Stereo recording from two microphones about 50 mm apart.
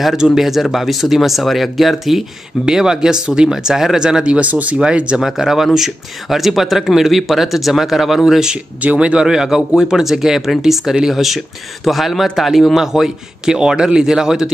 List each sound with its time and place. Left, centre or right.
0.0 s speech: centre; by 4.7 s right
4.7 s speech: centre
5.2 s speech: centre